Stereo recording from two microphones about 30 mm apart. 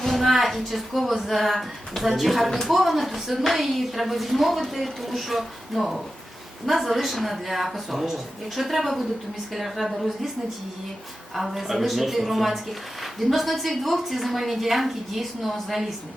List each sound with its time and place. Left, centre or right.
0.0 s a woman's voice: centre
11.3 s a woman's voice: centre